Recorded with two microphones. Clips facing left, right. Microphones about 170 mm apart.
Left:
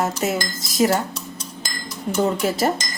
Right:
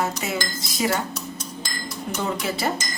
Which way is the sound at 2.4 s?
40° left (ahead or behind).